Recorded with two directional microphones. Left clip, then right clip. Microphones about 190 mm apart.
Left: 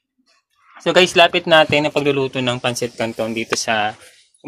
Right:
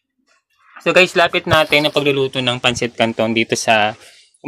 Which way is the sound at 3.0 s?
35° right (ahead or behind).